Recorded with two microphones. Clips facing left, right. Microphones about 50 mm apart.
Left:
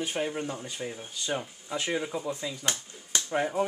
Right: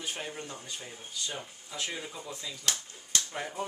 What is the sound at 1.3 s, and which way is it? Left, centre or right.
Speech, left.